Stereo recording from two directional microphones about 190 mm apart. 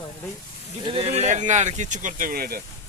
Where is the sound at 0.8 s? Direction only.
30° right (ahead or behind); by 2.6 s 50° right (ahead or behind).